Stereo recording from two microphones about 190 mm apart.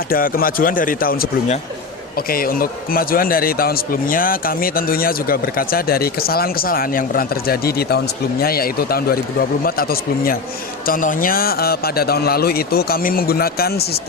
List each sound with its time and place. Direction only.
0.1 s a man's voice: 50° left (ahead or behind)